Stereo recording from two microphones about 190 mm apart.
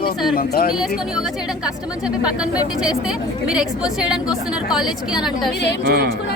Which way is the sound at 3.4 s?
5° right (ahead or behind).